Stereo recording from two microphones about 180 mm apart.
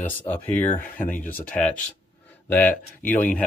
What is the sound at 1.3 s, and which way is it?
Speech, 10° left (ahead or behind).